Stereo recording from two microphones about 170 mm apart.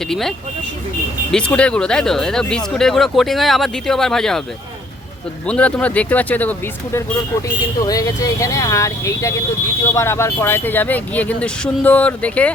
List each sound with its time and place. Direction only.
0.1 s speech: centre (ahead or behind)
5.5 s speech: 5° left (ahead or behind)
7.9 s speech: 20° left (ahead or behind)